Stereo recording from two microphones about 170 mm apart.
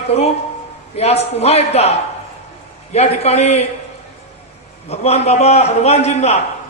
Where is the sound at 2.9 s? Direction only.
40° left (ahead or behind).